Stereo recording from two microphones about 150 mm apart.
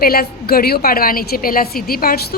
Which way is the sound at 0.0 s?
90° left.